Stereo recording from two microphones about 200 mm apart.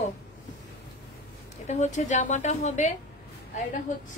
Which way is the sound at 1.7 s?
35° left (ahead or behind).